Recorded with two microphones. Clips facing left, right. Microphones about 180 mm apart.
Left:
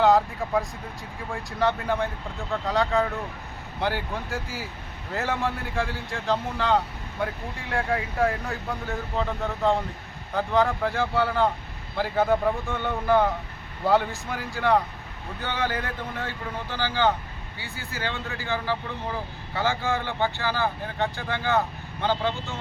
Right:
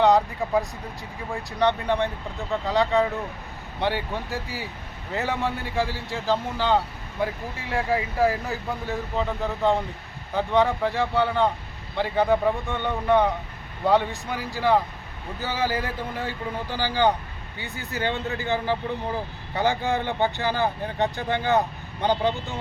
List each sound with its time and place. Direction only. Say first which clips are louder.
0.0 s speech: right 1 dB; centre (ahead or behind); by 22.5 s 15° right (ahead or behind)